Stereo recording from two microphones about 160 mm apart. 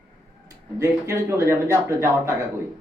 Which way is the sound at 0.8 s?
15° right (ahead or behind).